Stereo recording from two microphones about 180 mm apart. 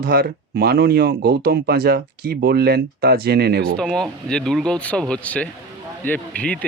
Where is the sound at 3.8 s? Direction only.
5° left (ahead or behind).